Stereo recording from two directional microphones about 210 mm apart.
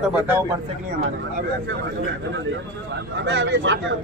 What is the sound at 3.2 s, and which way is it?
Speech, 60° right (ahead or behind).